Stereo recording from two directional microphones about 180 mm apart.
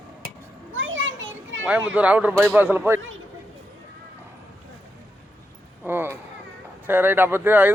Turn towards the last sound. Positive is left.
turn(degrees=-10)  # may be behind; listen again after turning